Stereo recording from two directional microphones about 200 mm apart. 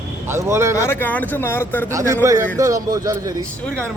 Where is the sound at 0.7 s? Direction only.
10° left (ahead or behind).